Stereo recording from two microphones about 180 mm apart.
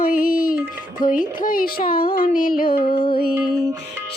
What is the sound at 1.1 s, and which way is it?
Music, 50° left (ahead or behind).